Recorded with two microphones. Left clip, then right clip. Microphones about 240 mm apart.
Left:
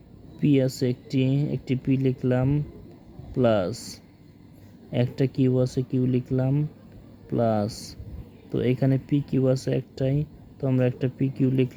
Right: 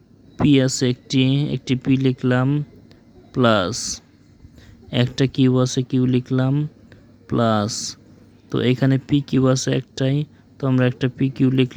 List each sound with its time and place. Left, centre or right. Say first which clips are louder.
0.4 s speech: right 5 dB; right